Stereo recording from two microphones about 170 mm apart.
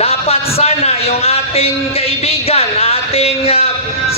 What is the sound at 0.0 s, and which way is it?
A man's voice, 35° left (ahead or behind).